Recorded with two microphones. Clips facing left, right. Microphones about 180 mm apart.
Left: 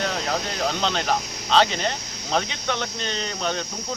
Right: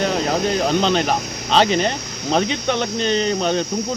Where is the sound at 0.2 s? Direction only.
55° right (ahead or behind).